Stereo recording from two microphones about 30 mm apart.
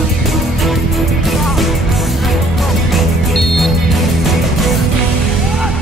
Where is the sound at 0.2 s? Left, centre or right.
Centre.